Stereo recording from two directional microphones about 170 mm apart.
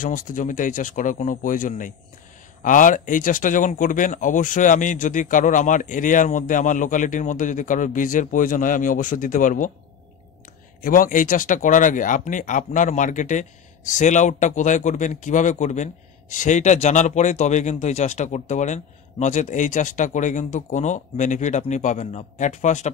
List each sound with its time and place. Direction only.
0.0 s speech: 50° left (ahead or behind)
10.8 s speech: 50° left (ahead or behind)